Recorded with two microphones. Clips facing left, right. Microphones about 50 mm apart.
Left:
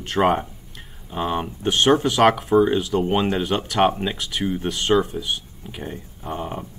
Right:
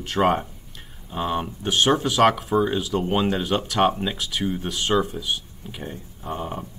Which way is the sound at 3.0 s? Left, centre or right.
Centre.